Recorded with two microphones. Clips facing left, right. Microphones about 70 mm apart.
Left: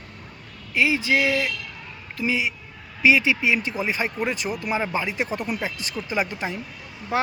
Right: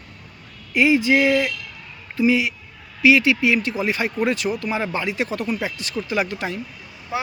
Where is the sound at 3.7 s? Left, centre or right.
Centre.